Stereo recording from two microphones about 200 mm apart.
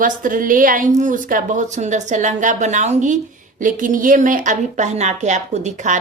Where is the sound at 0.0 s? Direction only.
40° right (ahead or behind).